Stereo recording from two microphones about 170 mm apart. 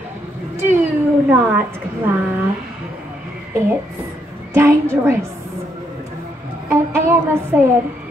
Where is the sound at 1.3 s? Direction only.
10° right (ahead or behind).